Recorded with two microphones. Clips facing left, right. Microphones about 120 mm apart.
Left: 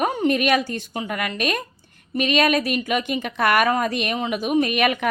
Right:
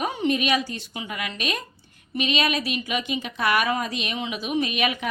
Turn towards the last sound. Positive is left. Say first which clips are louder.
# left 5 dB
turn(degrees=55)  # may be behind; listen again after turning